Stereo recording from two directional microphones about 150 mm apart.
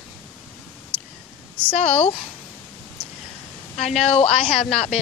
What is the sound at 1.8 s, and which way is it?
Speech, 45° left (ahead or behind).